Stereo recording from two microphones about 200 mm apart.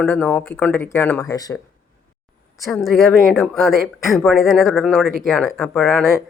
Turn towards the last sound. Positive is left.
turn(degrees=0)  # may be behind; listen again after turning